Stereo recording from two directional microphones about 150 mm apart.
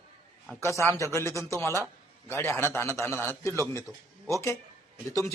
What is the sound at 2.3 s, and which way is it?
A man's voice, 15° left (ahead or behind).